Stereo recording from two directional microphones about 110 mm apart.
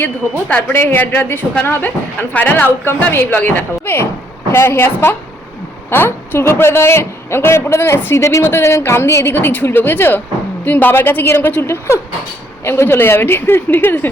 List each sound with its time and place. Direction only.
0.4 s a woman's voice: 15° left (ahead or behind)